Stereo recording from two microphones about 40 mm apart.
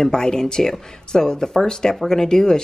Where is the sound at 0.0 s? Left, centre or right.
Centre.